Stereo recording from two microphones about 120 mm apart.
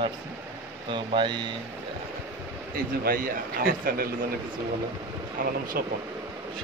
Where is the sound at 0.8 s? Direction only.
45° right (ahead or behind).